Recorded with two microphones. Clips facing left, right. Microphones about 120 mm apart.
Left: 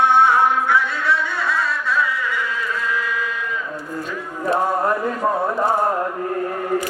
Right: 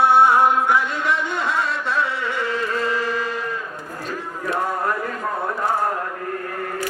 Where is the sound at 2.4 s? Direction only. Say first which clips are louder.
Right 2 dB; 60° right (ahead or behind).